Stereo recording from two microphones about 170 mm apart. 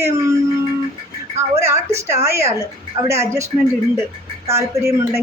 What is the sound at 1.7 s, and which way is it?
Speech, 15° right (ahead or behind).